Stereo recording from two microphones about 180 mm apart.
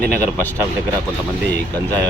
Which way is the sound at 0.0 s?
10° left (ahead or behind).